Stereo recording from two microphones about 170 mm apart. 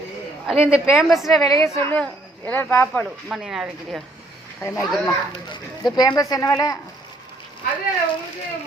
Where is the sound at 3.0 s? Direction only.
5° right (ahead or behind).